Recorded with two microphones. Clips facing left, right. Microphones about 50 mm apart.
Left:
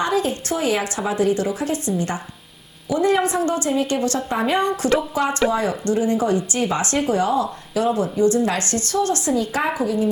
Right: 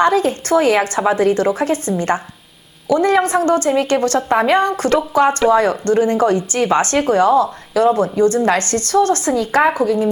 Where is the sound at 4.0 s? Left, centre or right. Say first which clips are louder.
Right 6 dB; right.